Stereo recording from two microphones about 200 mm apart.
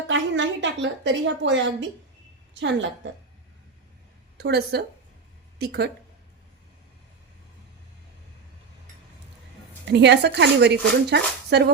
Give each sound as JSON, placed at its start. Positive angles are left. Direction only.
{"t": 0.1, "sound": "a woman's voice", "side_deg": -65}
{"t": 4.4, "sound": "speech", "side_deg": -55}
{"t": 9.8, "sound": "speech", "side_deg": -60}